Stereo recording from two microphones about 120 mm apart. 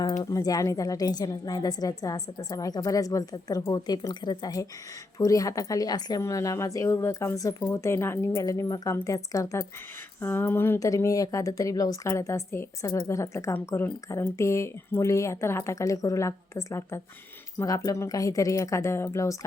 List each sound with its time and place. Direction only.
0.2 s a woman's voice: 30° left (ahead or behind)